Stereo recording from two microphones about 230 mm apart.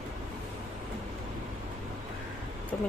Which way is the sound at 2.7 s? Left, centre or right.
Centre.